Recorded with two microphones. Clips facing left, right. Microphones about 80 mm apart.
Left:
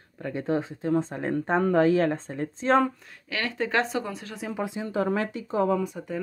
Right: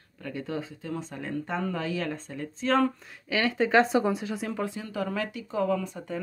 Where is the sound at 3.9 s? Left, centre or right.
Centre.